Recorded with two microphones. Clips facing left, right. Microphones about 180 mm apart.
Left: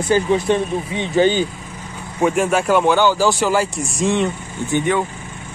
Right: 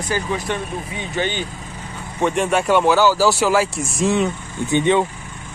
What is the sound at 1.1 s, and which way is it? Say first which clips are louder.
Speech: left 9 dB; 35° left (ahead or behind).